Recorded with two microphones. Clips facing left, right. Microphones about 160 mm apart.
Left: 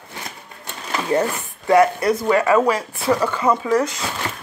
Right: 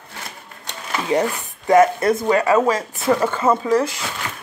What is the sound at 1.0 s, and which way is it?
Speech, 20° right (ahead or behind).